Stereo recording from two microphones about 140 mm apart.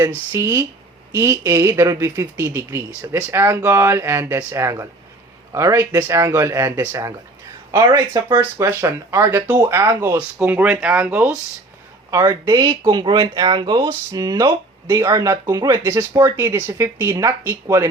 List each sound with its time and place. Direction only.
0.3 s speech: 20° right (ahead or behind)
12.1 s speech: 25° right (ahead or behind)